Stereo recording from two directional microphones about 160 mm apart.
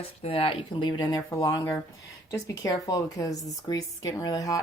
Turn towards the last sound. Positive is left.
turn(degrees=20)  # may be behind; listen again after turning